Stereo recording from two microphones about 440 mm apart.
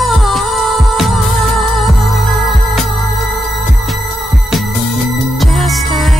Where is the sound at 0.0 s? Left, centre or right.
Centre.